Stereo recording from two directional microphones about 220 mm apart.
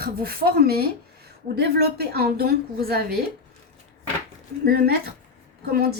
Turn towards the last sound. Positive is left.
turn(degrees=-45)  # may be behind; listen again after turning